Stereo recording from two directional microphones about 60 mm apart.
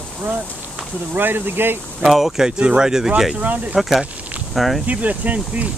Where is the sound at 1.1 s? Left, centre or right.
Right.